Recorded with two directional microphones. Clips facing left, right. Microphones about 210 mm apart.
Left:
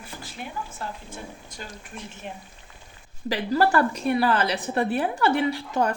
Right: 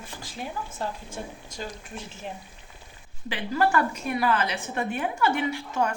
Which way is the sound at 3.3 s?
35° left (ahead or behind).